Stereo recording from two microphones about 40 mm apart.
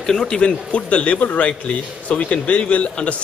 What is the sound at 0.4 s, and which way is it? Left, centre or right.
A man's voice, left.